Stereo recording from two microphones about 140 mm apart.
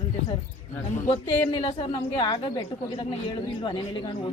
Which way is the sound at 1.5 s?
35° left (ahead or behind).